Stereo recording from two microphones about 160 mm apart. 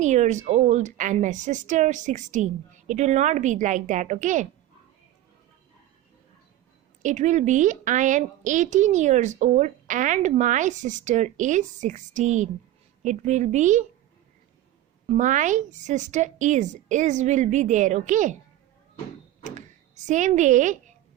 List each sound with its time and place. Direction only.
0.0 s a woman's voice: 50° right (ahead or behind)
7.0 s a woman's voice: 50° right (ahead or behind)
15.0 s a woman's voice: 45° right (ahead or behind)
19.5 s speech: 50° right (ahead or behind)